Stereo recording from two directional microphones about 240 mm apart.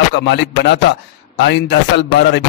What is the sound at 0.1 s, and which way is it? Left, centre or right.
A man's voice, left.